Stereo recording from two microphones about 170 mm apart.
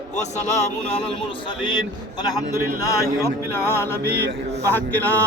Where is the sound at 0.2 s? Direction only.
40° left (ahead or behind).